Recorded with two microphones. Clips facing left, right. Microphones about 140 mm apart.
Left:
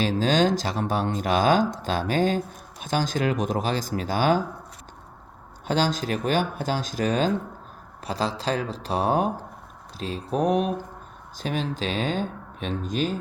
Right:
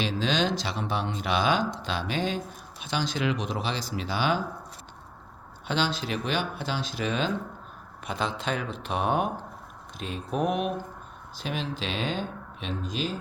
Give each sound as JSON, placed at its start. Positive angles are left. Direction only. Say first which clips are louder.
{"t": 0.0, "sound": "speech", "louder": "left 5 dB", "side_deg": 45}
{"t": 5.6, "sound": "speech", "louder": "left 4 dB", "side_deg": 40}